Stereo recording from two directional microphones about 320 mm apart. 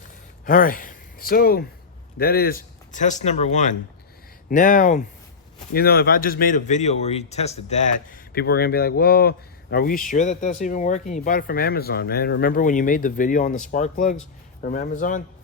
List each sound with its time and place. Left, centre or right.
0.4 s speech: left